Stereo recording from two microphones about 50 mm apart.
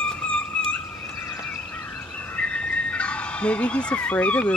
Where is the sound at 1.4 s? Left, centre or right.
Left.